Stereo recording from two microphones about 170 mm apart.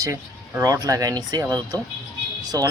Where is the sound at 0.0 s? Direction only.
20° right (ahead or behind).